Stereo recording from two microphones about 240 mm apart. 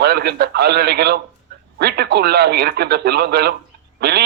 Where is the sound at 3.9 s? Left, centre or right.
Right.